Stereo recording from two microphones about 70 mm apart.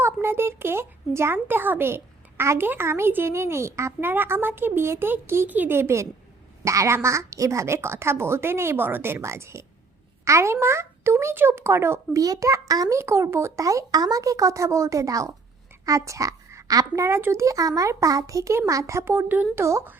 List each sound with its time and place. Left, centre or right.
0.0 s a woman's voice: right
4.1 s a woman's voice: right
12.2 s a child's voice: right
12.7 s a child's voice: right
13.0 s a woman's voice: right
13.6 s a woman's voice: right
17.2 s a woman's voice: right
17.4 s speech: right
19.3 s speech: right